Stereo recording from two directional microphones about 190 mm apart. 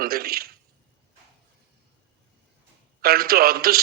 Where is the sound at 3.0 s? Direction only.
50° right (ahead or behind).